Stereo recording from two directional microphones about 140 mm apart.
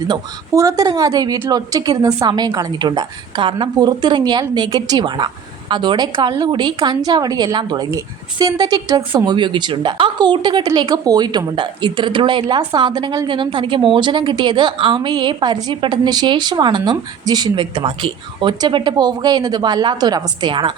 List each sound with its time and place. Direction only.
0.1 s a woman's voice: 25° right (ahead or behind)